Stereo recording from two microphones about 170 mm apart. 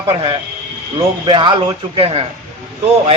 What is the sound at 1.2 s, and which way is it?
A man's voice, 25° right (ahead or behind).